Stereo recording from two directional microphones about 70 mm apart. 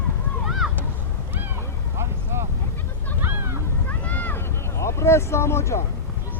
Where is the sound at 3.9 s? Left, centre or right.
Left.